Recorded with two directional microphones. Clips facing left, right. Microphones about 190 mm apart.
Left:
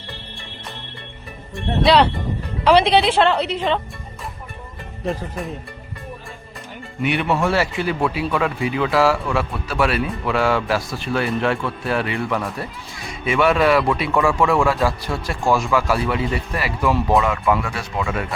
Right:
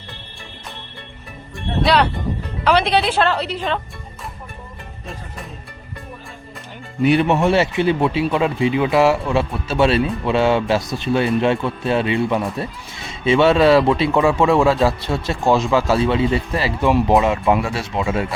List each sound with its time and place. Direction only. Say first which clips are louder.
2.6 s a woman's voice: left 2 dB; 25° left (ahead or behind)
7.0 s speech: right 7 dB; 35° right (ahead or behind)
7.3 s speech: right 3 dB; 20° right (ahead or behind)